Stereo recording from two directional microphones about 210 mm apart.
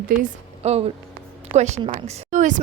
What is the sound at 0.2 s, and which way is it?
A woman's voice, 30° right (ahead or behind).